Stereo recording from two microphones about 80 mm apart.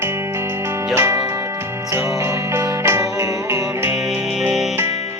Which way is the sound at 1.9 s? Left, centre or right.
Right.